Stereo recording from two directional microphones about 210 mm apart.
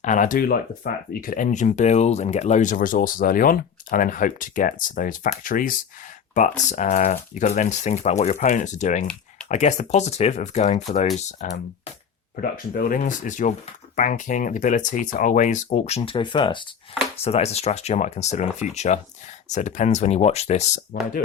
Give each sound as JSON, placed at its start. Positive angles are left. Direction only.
{"t": 0.0, "sound": "speech", "side_deg": 35}
{"t": 16.0, "sound": "speech", "side_deg": 25}